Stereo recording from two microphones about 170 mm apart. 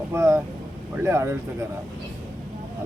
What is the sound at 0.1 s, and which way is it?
Vehicle, 15° right (ahead or behind).